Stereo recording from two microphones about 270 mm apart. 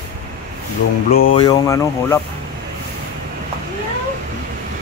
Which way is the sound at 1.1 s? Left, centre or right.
Left.